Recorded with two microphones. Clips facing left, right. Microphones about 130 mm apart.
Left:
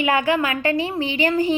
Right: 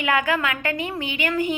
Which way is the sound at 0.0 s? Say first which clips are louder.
Left 3 dB; 30° left (ahead or behind).